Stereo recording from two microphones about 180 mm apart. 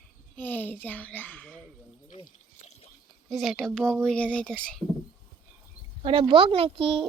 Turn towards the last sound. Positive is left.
turn(degrees=-30)  # may be behind; listen again after turning